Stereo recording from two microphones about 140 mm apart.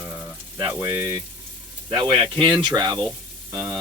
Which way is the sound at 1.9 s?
30° right (ahead or behind).